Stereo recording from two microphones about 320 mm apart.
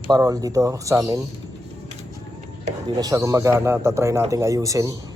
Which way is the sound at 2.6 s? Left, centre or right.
Centre.